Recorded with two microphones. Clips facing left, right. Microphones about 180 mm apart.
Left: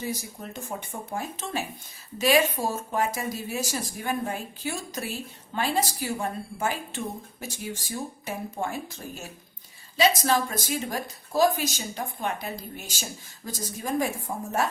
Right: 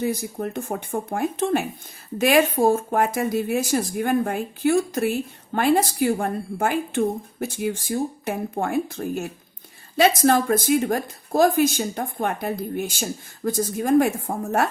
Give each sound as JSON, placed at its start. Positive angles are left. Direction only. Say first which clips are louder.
{"t": 0.0, "sound": "speech", "louder": "right 9 dB", "side_deg": -55}